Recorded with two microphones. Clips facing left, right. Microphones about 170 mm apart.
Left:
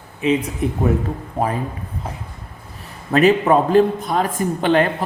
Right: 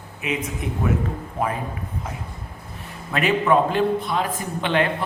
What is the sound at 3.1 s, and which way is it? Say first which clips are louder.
A man's voice: left 6 dB; 40° left (ahead or behind).